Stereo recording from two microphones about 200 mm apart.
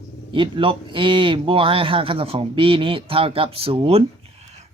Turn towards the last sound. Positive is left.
turn(degrees=-30)  # may be behind; listen again after turning